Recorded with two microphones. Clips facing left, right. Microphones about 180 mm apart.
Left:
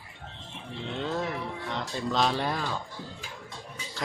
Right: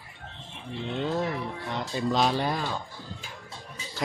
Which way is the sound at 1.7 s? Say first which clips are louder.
Right 4 dB; 5° right (ahead or behind).